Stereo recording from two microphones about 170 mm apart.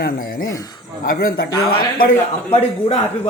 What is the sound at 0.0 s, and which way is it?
Speech, 55° left (ahead or behind).